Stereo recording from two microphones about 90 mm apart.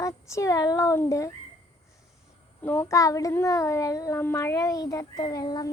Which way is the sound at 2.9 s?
40° left (ahead or behind).